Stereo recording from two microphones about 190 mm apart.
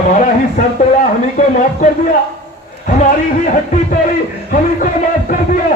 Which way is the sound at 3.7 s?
45° left (ahead or behind).